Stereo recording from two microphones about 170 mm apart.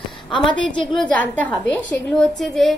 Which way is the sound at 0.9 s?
5° left (ahead or behind).